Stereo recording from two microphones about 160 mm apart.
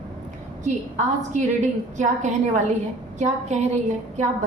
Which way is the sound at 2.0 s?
50° right (ahead or behind).